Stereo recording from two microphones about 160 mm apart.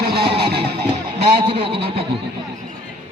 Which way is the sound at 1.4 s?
35° right (ahead or behind).